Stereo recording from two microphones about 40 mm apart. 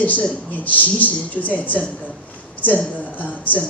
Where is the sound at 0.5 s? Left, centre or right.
Left.